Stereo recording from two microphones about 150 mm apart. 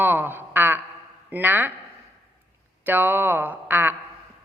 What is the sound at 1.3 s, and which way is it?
Speech, 10° right (ahead or behind).